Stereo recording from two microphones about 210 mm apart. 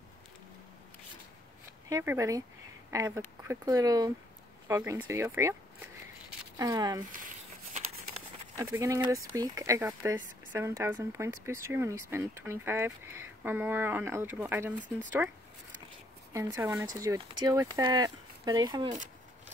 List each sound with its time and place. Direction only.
1.9 s speech: 15° right (ahead or behind)
7.0 s crumpling: 40° right (ahead or behind)
8.5 s speech: 15° right (ahead or behind)